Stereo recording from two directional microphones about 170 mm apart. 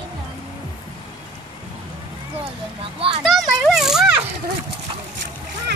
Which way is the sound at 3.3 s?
Centre (ahead or behind).